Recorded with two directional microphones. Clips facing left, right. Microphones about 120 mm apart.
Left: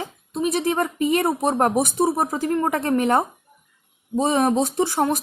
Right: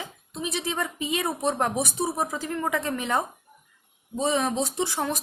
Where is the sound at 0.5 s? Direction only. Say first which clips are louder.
Left 6 dB; 50° left (ahead or behind).